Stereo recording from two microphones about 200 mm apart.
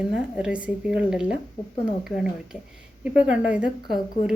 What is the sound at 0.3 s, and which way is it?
A woman's voice, 5° right (ahead or behind).